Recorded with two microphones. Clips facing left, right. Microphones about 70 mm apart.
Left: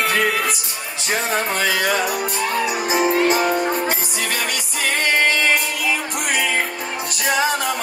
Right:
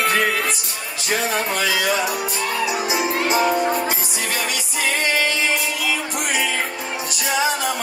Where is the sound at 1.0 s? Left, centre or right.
Left.